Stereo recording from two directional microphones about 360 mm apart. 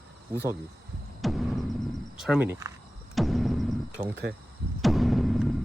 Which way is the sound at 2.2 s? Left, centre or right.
Centre.